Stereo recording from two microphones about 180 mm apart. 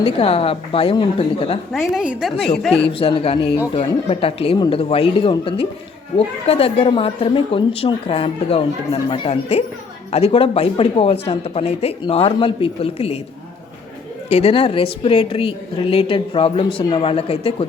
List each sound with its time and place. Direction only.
0.0 s speech: 30° left (ahead or behind)
1.7 s a woman's voice: centre (ahead or behind)
2.8 s a woman's voice: 30° left (ahead or behind)
14.3 s speech: 35° left (ahead or behind)